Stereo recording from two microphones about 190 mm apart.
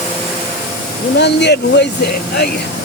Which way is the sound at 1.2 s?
65° left (ahead or behind).